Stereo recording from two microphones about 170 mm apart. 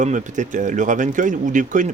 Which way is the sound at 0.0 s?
45° right (ahead or behind).